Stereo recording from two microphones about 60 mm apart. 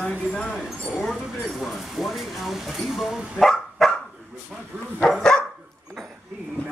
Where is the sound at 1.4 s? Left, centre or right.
Centre.